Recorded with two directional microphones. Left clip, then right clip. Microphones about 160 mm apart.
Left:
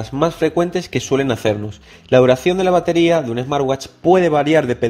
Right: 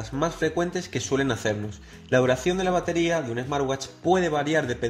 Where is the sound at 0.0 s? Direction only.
35° left (ahead or behind).